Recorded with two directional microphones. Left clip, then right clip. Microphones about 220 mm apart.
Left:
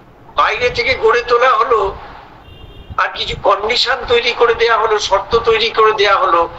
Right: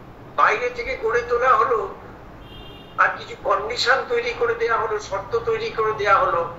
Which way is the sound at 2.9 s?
50° left (ahead or behind).